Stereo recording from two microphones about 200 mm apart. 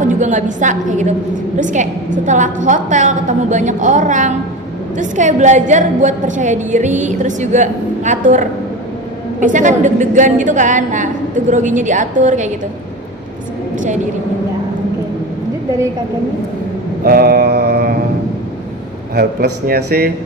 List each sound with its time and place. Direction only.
0.0 s a woman's voice: 40° right (ahead or behind)
17.0 s mantra: 45° right (ahead or behind)
19.1 s mantra: 50° right (ahead or behind)